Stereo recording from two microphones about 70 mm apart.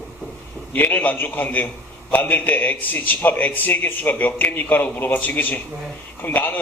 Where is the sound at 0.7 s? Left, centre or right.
Left.